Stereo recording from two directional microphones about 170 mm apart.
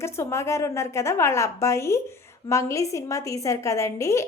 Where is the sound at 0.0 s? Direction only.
15° left (ahead or behind).